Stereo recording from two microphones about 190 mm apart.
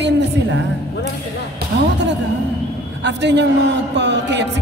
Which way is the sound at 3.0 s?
65° right (ahead or behind).